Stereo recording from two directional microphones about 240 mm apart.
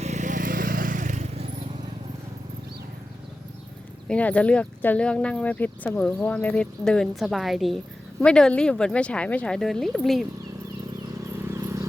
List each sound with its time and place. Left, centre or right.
0.0 s vehicle: right
4.1 s speech: centre
11.3 s a sound: centre